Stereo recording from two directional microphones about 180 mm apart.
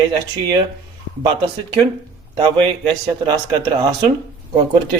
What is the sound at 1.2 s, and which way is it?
Speech, 25° right (ahead or behind).